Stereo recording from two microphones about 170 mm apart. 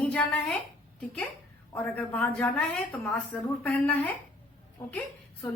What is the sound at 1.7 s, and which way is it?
A woman's voice, 10° left (ahead or behind).